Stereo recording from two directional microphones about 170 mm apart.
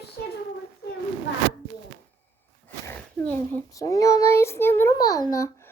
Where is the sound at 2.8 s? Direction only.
10° left (ahead or behind).